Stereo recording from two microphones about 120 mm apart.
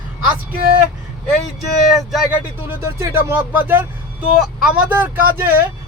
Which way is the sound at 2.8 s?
25° right (ahead or behind).